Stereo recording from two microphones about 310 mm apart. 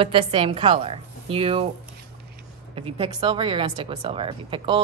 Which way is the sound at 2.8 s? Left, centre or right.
Centre.